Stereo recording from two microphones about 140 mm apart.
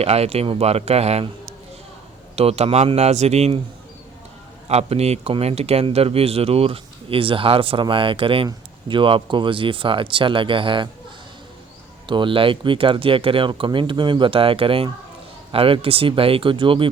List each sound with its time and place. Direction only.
0.0 s speech: 50° right (ahead or behind)
4.7 s speech: 45° right (ahead or behind)
12.0 s speech: 35° right (ahead or behind)